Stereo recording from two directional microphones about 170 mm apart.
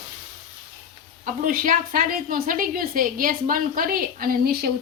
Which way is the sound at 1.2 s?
55° right (ahead or behind).